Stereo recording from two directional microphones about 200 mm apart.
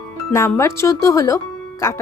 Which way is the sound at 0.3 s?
15° left (ahead or behind).